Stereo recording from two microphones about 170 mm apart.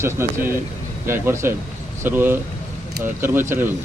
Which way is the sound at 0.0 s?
15° right (ahead or behind).